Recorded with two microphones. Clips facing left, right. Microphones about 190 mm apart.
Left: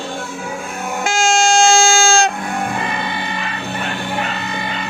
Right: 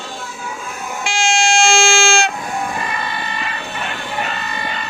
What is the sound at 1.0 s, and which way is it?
Vehicle, 45° left (ahead or behind).